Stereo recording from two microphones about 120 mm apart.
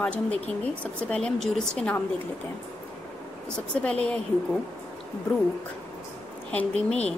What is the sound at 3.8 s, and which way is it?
Speech, 10° left (ahead or behind).